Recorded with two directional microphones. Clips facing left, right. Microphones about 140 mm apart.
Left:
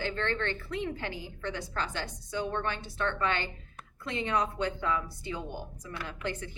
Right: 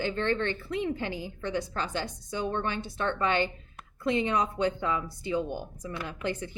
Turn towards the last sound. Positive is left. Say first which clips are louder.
# right 4 dB
turn(degrees=-15)  # may be behind; listen again after turning